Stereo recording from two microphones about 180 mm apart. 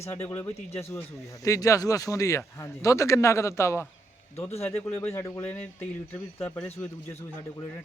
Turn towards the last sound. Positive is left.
turn(degrees=10)  # may be behind; listen again after turning